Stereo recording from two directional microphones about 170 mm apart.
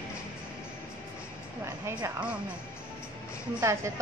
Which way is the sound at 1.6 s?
15° right (ahead or behind).